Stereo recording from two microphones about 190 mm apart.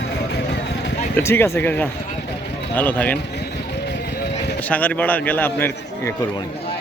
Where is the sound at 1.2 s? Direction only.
15° left (ahead or behind).